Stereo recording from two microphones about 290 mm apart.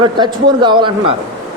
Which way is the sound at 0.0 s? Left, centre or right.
Centre.